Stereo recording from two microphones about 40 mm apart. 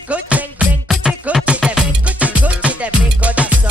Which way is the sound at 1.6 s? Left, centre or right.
Centre.